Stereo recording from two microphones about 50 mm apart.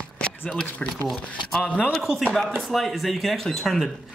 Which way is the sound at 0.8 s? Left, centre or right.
Left.